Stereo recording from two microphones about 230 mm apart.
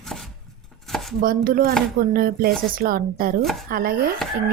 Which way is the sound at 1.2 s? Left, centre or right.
Right.